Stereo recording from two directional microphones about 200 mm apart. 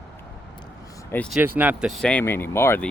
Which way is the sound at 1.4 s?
10° right (ahead or behind).